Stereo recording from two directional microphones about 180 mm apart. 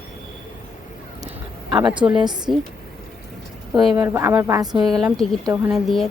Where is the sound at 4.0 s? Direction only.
15° right (ahead or behind).